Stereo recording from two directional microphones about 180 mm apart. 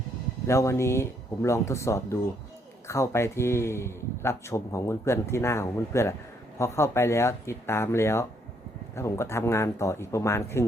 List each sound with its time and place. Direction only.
0.4 s speech: 15° left (ahead or behind)